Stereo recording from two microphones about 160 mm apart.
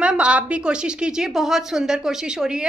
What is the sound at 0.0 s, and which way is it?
A woman's voice, 5° right (ahead or behind).